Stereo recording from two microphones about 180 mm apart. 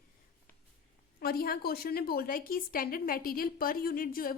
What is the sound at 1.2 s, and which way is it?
A woman's voice, 55° left (ahead or behind).